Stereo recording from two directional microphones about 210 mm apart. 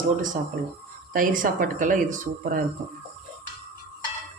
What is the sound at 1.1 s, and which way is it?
Speech, 40° right (ahead or behind).